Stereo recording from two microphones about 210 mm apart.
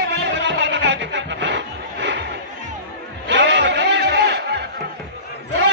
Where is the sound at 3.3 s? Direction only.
55° right (ahead or behind).